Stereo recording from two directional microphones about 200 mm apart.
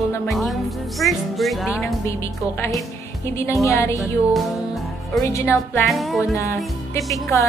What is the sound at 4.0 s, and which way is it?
Music, centre (ahead or behind).